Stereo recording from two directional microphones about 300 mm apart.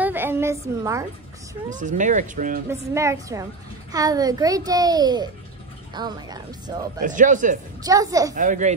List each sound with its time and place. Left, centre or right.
0.0 s a sound: centre
1.7 s speech: right
2.7 s a child's voice: centre
7.0 s speech: right
7.8 s a child's voice: centre
8.4 s speech: right